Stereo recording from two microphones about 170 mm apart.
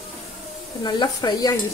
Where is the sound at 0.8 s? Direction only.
25° left (ahead or behind).